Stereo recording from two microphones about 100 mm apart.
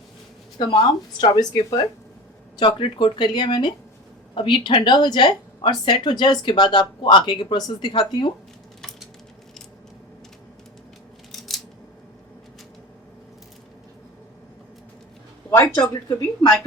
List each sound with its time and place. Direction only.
0.6 s a woman's voice: 45° left (ahead or behind)
8.8 s a sound: centre (ahead or behind)
11.3 s scissors: centre (ahead or behind)
15.9 s speech: 40° left (ahead or behind)